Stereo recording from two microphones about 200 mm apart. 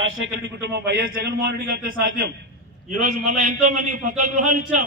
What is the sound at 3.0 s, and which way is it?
A man's voice, 40° right (ahead or behind).